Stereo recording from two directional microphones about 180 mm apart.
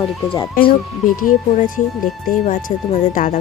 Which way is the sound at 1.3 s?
45° left (ahead or behind).